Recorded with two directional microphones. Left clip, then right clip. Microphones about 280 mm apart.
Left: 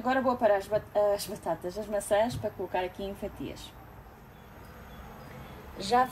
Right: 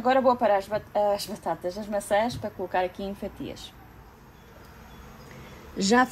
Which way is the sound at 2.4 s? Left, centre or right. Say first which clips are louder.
Right 4 dB; right.